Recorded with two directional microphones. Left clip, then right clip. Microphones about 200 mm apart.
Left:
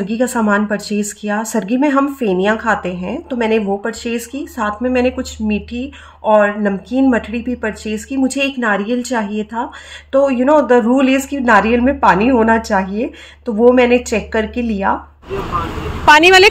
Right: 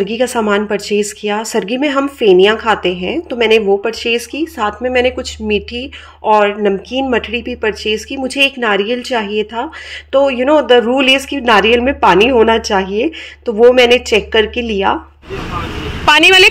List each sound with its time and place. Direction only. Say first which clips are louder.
0.0 s speech: right 3 dB; 35° right (ahead or behind)
16.1 s a woman's voice: even; 10° left (ahead or behind)